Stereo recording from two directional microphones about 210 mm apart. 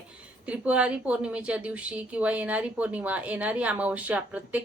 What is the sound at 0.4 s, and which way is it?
A woman's voice, 5° right (ahead or behind).